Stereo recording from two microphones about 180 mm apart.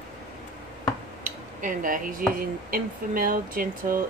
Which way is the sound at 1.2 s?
50° right (ahead or behind).